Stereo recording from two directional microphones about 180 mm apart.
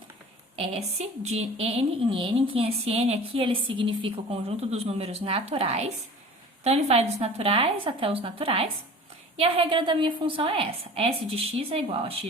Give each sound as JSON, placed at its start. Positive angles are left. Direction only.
{"t": 0.5, "sound": "a woman's voice", "side_deg": -35}